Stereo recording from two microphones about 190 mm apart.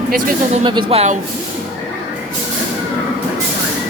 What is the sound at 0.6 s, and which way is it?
Speech, 30° right (ahead or behind).